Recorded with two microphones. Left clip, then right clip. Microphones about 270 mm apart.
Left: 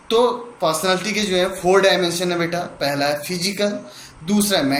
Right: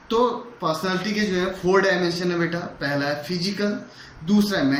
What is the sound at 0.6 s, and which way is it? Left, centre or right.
Speech, centre.